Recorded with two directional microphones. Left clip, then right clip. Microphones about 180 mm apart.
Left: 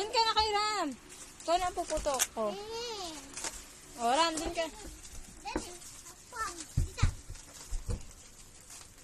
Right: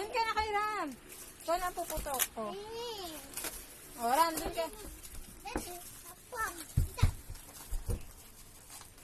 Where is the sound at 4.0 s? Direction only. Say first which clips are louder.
Left 1 dB; 40° left (ahead or behind).